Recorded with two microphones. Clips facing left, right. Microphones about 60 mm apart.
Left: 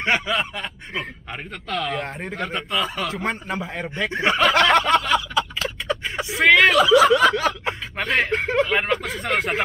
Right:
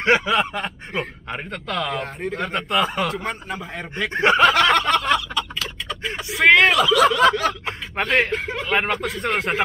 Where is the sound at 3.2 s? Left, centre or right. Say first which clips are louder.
Left 2 dB; centre.